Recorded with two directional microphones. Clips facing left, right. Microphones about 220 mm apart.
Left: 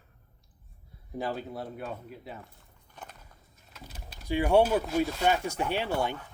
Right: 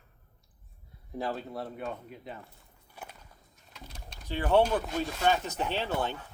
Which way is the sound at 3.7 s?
5° left (ahead or behind).